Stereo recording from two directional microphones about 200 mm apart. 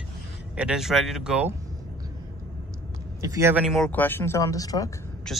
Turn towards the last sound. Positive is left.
turn(degrees=5)  # may be behind; listen again after turning